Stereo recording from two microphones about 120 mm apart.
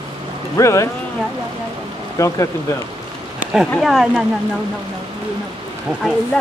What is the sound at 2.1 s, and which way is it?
Speech, 25° left (ahead or behind).